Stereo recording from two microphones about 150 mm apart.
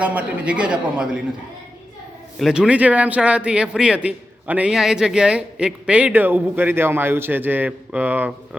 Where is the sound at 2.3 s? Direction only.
Centre (ahead or behind).